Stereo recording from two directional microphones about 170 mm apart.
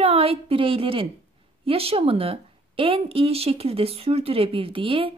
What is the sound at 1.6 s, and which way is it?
A woman's voice, 35° right (ahead or behind).